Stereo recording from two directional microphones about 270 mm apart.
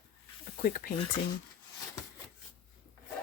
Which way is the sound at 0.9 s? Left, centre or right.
Centre.